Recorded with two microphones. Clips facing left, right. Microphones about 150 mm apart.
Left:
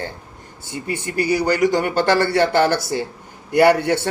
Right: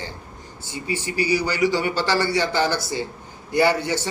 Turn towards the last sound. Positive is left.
turn(degrees=60)  # may be behind; listen again after turning